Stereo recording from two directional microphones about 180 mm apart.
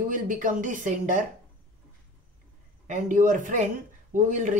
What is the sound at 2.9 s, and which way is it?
Speech, 45° right (ahead or behind).